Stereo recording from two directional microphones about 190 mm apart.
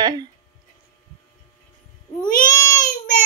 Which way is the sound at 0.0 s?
20° right (ahead or behind).